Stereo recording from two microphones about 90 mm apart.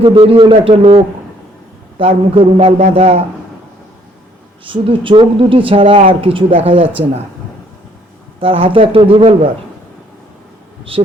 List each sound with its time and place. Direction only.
0.0 s a man's voice: 90° right
4.6 s speech: 75° right (ahead or behind)
8.4 s a man's voice: 90° right
10.9 s a man's voice: 90° right